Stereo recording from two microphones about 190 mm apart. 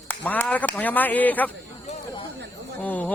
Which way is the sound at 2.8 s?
10° left (ahead or behind).